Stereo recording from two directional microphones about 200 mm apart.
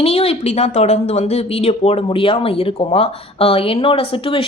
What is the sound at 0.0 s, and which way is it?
Speech, 30° left (ahead or behind).